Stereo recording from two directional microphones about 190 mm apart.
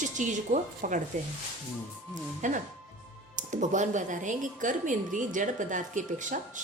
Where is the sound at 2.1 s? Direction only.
40° right (ahead or behind).